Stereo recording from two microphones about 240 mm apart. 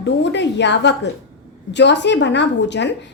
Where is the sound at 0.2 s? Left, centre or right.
Left.